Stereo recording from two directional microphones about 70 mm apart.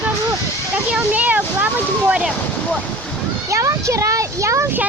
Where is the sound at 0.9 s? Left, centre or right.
Right.